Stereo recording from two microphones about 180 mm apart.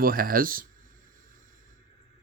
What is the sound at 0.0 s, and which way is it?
Speech, 55° right (ahead or behind).